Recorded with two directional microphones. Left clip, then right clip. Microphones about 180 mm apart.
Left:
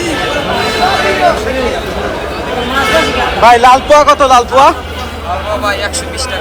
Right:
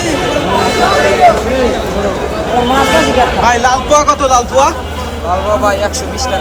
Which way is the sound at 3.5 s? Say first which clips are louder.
Left 5 dB; 5° left (ahead or behind).